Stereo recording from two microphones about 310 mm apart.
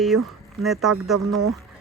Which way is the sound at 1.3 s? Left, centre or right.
Right.